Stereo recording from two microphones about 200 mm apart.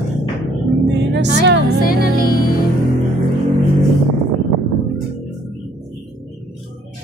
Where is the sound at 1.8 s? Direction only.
45° left (ahead or behind).